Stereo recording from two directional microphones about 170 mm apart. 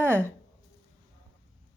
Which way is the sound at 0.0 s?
15° right (ahead or behind).